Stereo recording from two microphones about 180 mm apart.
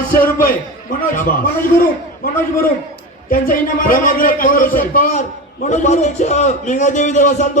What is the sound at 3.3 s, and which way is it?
A man's voice, 50° left (ahead or behind).